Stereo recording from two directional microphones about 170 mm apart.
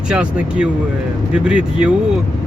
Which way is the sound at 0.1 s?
5° right (ahead or behind).